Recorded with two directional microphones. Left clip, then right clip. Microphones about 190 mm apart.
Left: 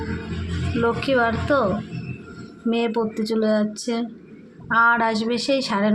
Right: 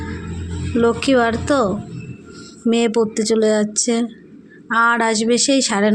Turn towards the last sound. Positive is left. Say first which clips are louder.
# right 5 dB
turn(degrees=-45)  # may be behind; listen again after turning